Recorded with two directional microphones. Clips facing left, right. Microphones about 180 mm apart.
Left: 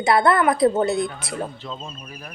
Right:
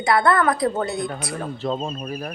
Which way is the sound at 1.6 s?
45° right (ahead or behind).